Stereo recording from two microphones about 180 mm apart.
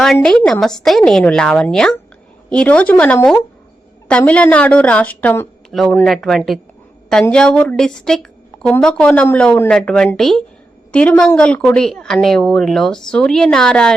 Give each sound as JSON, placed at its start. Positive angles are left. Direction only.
{"t": 0.0, "sound": "a woman's voice", "side_deg": 5}